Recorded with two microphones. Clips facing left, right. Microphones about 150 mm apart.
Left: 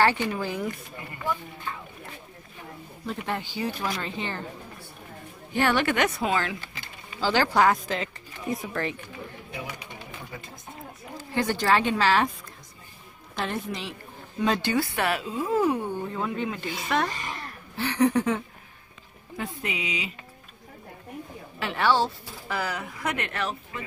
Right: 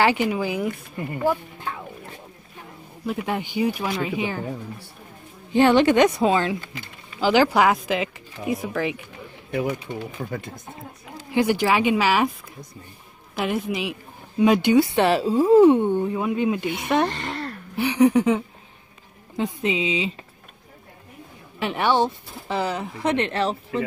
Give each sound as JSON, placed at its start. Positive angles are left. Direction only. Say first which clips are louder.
{"t": 0.0, "sound": "speech", "louder": "right 3 dB", "side_deg": -10}
{"t": 3.1, "sound": "speech", "louder": "right 5 dB", "side_deg": -15}
{"t": 5.5, "sound": "speech", "louder": "right 8 dB", "side_deg": -20}
{"t": 11.3, "sound": "speech", "louder": "right 4 dB", "side_deg": -10}
{"t": 13.4, "sound": "speech", "louder": "right 6 dB", "side_deg": -5}
{"t": 17.1, "sound": "speech", "louder": "right 6 dB", "side_deg": -70}
{"t": 17.7, "sound": "speech", "louder": "right 5 dB", "side_deg": -15}
{"t": 21.5, "sound": "speech", "louder": "right 3 dB", "side_deg": -20}